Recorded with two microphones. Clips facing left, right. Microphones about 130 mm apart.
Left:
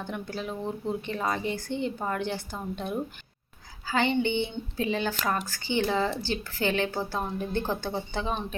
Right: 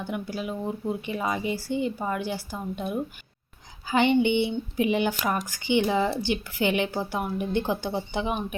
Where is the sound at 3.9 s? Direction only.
15° right (ahead or behind).